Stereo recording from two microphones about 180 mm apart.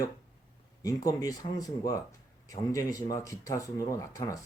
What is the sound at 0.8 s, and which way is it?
Speech, 20° left (ahead or behind).